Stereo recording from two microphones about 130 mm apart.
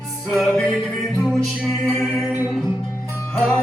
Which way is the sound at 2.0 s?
5° right (ahead or behind).